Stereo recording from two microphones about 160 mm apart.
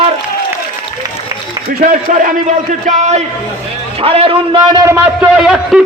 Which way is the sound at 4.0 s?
35° right (ahead or behind).